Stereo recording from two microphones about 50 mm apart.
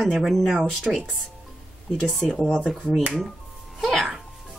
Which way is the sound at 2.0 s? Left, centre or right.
Centre.